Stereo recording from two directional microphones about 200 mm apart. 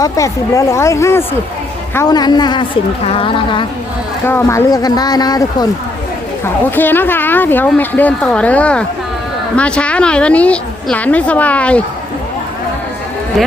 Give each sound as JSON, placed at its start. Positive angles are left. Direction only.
{"t": 0.0, "sound": "speech", "side_deg": 15}
{"t": 4.3, "sound": "speech", "side_deg": 10}